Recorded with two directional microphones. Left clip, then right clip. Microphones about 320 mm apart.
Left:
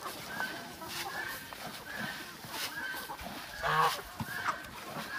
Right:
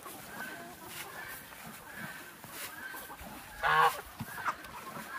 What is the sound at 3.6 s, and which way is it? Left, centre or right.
Goose, centre.